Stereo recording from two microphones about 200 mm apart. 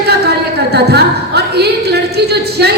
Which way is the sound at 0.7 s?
55° right (ahead or behind).